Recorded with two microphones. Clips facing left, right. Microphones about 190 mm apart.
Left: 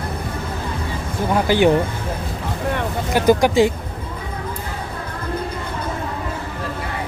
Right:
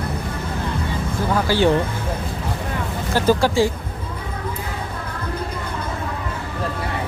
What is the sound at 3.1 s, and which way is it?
Speech, 15° left (ahead or behind).